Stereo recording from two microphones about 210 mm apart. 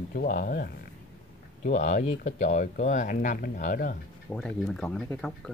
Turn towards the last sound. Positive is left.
turn(degrees=5)  # may be behind; listen again after turning